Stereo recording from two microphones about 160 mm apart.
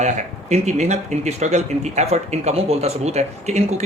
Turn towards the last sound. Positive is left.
turn(degrees=-45)  # may be behind; listen again after turning